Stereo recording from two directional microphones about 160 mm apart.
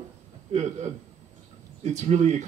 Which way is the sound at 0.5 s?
45° right (ahead or behind).